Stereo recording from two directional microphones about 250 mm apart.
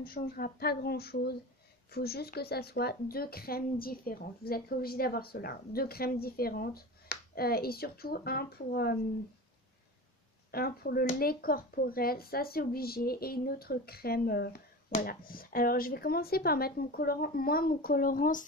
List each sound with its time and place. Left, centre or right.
0.0 s speech: left
10.5 s speech: left